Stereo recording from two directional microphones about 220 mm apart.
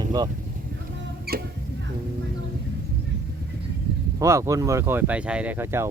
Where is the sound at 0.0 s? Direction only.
15° right (ahead or behind).